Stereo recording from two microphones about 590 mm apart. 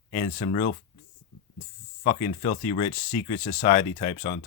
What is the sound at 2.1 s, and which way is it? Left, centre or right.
Speech, centre.